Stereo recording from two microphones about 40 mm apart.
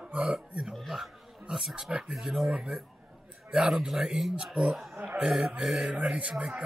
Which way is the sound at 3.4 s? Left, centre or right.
Right.